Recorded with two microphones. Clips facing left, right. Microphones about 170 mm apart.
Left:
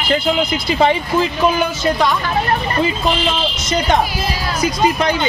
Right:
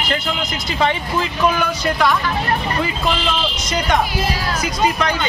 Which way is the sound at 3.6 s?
30° left (ahead or behind).